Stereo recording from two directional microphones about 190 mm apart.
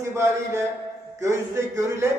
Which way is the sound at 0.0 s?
15° right (ahead or behind).